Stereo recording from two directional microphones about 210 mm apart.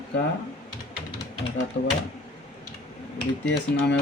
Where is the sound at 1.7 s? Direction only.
60° left (ahead or behind).